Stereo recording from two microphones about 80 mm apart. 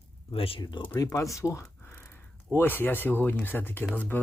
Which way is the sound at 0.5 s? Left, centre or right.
Left.